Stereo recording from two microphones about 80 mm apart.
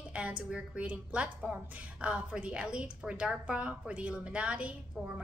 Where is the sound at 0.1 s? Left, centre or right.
Centre.